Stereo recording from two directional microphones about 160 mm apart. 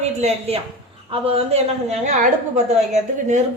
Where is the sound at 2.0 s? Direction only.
50° right (ahead or behind).